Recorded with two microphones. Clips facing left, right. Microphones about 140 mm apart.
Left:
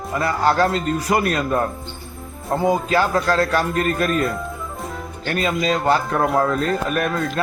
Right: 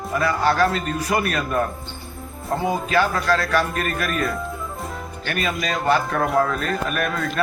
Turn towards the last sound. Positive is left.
turn(degrees=25)  # may be behind; listen again after turning